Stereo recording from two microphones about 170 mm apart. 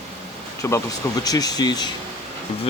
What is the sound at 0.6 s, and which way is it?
Speech, 15° left (ahead or behind).